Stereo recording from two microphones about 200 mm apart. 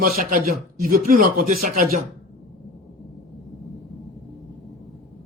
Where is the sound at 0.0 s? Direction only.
45° right (ahead or behind).